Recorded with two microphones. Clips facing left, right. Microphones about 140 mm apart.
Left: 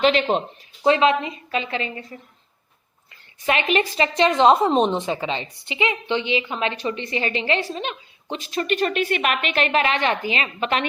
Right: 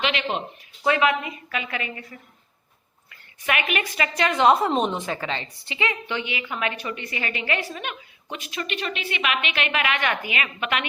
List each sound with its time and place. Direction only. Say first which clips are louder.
0.0 s a woman's voice: left 7 dB; 40° left (ahead or behind)
3.4 s a woman's voice: left 5 dB; 30° left (ahead or behind)